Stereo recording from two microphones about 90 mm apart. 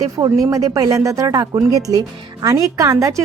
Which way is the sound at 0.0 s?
35° right (ahead or behind).